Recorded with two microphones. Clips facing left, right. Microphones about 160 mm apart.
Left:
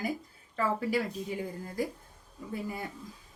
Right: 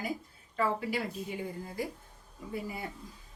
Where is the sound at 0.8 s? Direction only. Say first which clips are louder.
Left 4 dB; 40° left (ahead or behind).